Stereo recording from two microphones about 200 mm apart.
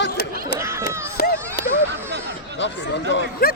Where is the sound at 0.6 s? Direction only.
15° right (ahead or behind).